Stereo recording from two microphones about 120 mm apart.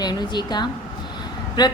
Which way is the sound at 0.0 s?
35° left (ahead or behind).